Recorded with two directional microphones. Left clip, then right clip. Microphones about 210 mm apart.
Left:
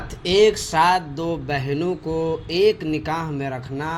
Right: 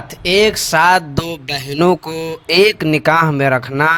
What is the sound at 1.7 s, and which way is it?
Speech, 55° right (ahead or behind).